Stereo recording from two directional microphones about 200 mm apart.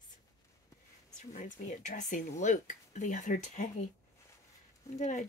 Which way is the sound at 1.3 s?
35° left (ahead or behind).